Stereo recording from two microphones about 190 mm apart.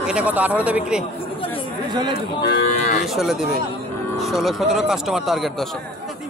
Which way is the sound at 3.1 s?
Centre (ahead or behind).